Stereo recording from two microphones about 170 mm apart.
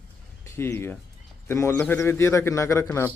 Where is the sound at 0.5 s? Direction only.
15° left (ahead or behind).